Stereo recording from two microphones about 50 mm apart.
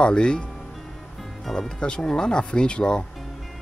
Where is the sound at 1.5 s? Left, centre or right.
Centre.